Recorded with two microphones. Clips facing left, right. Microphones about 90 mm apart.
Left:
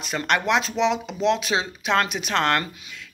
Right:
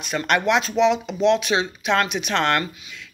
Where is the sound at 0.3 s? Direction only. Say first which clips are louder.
Right 2 dB; 30° left (ahead or behind).